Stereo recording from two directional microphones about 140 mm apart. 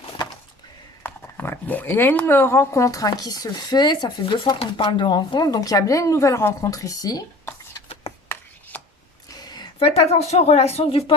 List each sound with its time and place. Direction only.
1.0 s speech: 15° left (ahead or behind)
8.1 s chopping: 50° left (ahead or behind)
8.7 s chopping: 10° left (ahead or behind)
9.3 s a sound: 30° left (ahead or behind)
9.7 s speech: 40° left (ahead or behind)